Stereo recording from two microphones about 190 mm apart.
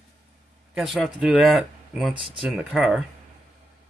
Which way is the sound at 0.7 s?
Centre (ahead or behind).